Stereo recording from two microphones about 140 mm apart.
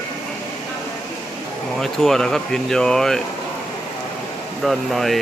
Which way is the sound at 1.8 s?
Centre (ahead or behind).